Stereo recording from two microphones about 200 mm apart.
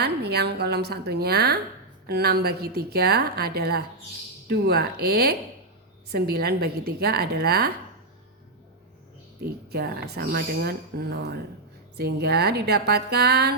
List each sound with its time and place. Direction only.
0.0 s speech: 55° right (ahead or behind)
9.4 s speech: 55° right (ahead or behind)